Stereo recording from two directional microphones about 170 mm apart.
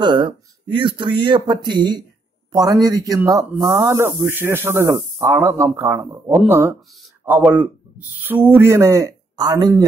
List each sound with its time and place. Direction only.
0.0 s a man's voice: 25° right (ahead or behind)